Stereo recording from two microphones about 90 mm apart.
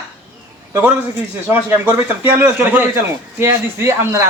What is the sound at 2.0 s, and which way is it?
A man's voice, 20° right (ahead or behind).